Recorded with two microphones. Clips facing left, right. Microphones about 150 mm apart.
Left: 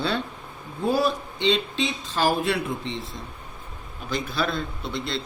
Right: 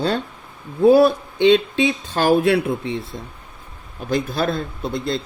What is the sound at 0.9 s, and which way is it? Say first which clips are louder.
Speech: right 9 dB; 60° right (ahead or behind).